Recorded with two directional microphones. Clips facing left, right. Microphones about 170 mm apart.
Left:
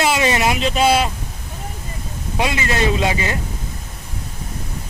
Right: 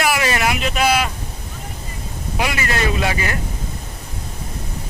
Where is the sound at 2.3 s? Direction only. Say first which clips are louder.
Left 2 dB; 25° left (ahead or behind).